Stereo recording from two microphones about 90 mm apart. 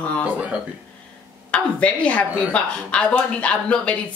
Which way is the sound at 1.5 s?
15° left (ahead or behind).